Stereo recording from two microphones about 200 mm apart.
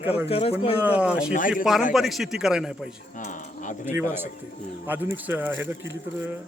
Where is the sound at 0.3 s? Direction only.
30° left (ahead or behind).